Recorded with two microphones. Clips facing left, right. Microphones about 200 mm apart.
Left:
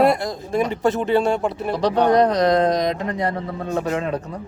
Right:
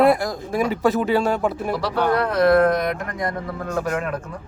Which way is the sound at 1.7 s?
20° left (ahead or behind).